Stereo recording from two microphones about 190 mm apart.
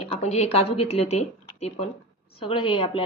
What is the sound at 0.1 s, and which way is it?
A woman's voice, 35° left (ahead or behind).